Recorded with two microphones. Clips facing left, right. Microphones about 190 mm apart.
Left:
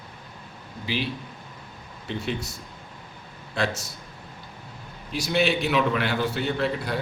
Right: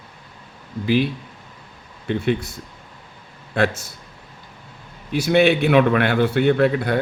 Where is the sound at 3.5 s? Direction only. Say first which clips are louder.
Right 7 dB; 55° right (ahead or behind).